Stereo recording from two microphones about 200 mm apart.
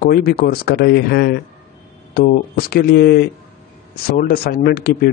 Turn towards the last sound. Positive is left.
turn(degrees=50)  # may be behind; listen again after turning